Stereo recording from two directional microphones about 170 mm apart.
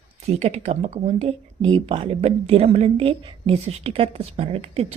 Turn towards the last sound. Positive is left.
turn(degrees=-35)  # may be behind; listen again after turning